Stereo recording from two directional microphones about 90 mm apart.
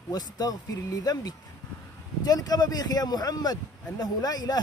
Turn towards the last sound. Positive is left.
turn(degrees=45)  # may be behind; listen again after turning